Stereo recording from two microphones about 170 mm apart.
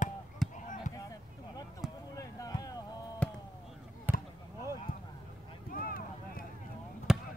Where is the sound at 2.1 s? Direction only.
20° left (ahead or behind).